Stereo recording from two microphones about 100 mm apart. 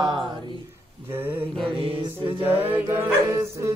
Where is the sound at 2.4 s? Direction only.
20° right (ahead or behind).